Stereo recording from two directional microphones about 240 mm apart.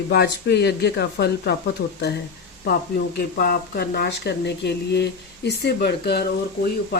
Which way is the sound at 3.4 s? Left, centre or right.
Left.